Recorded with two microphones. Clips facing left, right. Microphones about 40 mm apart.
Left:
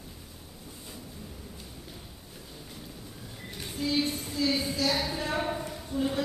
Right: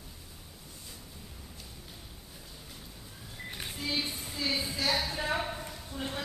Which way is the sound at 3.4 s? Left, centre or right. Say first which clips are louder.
Left 4 dB; centre.